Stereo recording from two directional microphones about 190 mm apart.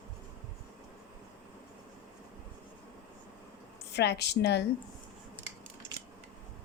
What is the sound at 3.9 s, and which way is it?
Speech, 65° left (ahead or behind).